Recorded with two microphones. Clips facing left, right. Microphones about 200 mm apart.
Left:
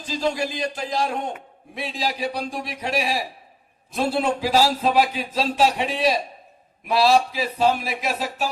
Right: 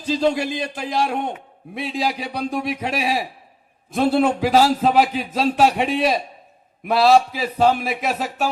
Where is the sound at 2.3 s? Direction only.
55° right (ahead or behind).